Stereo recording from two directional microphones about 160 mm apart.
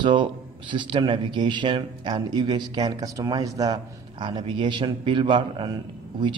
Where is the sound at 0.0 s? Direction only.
30° right (ahead or behind).